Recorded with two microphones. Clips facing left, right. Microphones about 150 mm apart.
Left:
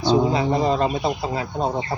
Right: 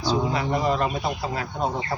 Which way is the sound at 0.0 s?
25° left (ahead or behind).